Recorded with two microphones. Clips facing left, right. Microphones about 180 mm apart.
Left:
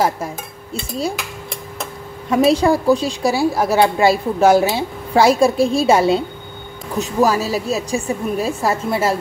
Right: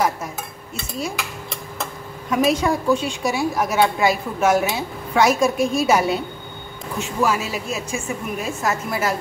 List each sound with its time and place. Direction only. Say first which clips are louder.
2.3 s a woman's voice: left 5 dB; 30° left (ahead or behind)